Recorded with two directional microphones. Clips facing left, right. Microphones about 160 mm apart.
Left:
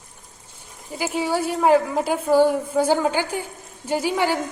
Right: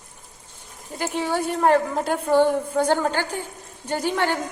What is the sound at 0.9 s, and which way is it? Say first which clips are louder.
A woman's voice: left 1 dB; 5° left (ahead or behind).